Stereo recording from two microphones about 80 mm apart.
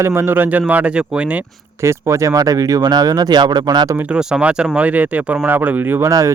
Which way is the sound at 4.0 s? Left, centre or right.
Centre.